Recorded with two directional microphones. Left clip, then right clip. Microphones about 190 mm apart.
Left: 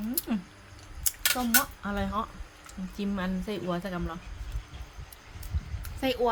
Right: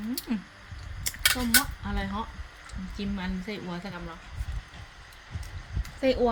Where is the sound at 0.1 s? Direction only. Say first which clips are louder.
Right 2 dB; 30° left (ahead or behind).